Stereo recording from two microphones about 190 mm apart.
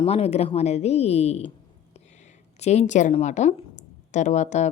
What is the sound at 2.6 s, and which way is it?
Speech, 35° left (ahead or behind).